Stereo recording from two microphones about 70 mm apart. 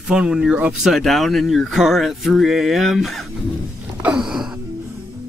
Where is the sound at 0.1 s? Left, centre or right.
Centre.